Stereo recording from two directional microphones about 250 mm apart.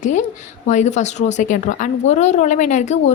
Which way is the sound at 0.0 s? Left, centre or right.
Left.